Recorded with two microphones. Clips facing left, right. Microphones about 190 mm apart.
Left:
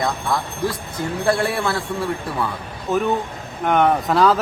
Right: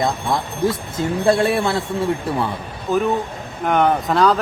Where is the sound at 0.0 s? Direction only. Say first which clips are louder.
Right 2 dB; 25° right (ahead or behind).